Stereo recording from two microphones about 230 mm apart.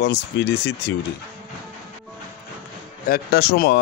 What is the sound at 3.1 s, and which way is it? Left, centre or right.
Speech, left.